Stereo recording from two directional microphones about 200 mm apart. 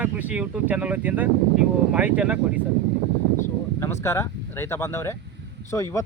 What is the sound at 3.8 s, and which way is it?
Speech, 15° left (ahead or behind).